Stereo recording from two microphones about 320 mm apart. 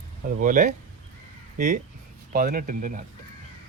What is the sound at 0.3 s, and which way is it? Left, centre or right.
Speech, right.